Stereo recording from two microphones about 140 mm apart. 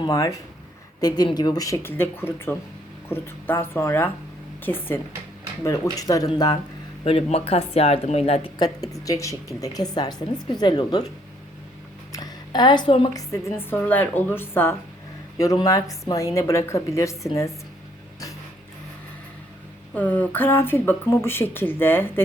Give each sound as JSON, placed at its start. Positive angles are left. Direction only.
{"t": 0.0, "sound": "a woman's voice", "side_deg": 25}
{"t": 7.0, "sound": "speech", "side_deg": 45}
{"t": 8.5, "sound": "a woman's voice", "side_deg": 30}
{"t": 12.1, "sound": "a sound", "side_deg": 30}
{"t": 13.6, "sound": "a woman's voice", "side_deg": 15}
{"t": 19.9, "sound": "speech", "side_deg": 10}